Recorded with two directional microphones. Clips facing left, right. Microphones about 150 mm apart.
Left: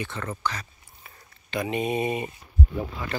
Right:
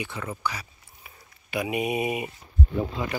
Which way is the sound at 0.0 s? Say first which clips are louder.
Left 1 dB; 10° right (ahead or behind).